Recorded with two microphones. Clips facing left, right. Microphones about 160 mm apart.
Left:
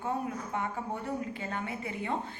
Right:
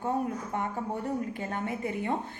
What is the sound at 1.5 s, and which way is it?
Speech, 45° right (ahead or behind).